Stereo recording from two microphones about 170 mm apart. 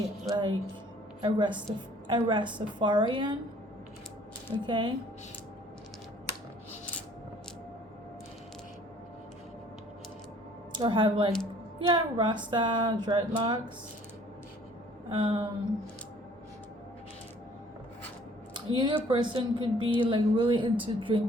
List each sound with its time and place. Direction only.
0.3 s speech: 25° right (ahead or behind)
4.6 s speech: 30° right (ahead or behind)
10.8 s speech: 30° right (ahead or behind)
15.1 s speech: 30° right (ahead or behind)
18.5 s a sound: 25° right (ahead or behind)
19.0 s a woman's voice: 30° right (ahead or behind)